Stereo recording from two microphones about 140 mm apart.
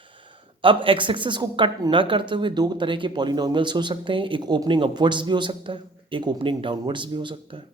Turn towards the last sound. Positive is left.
turn(degrees=-35)  # may be behind; listen again after turning